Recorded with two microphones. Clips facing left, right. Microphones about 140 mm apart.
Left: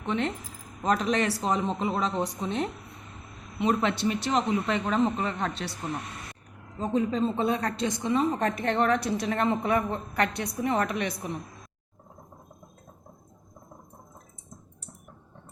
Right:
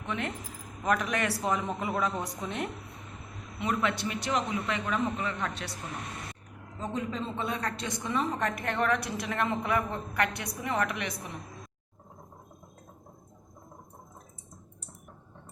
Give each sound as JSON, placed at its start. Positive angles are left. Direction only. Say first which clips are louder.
{"t": 0.0, "sound": "a woman's voice", "louder": "left 5 dB", "side_deg": 30}
{"t": 6.7, "sound": "a woman's voice", "louder": "left 7 dB", "side_deg": 25}